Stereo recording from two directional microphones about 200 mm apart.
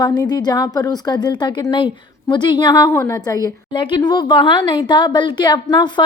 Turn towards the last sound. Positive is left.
turn(degrees=20)  # may be behind; listen again after turning